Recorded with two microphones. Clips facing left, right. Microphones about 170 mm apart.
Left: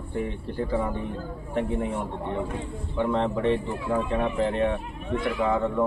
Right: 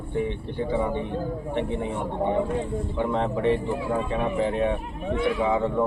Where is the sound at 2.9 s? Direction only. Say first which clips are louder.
Left 2 dB; 5° right (ahead or behind).